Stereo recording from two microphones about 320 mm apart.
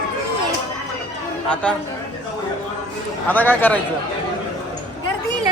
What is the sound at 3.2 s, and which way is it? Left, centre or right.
Speech, centre.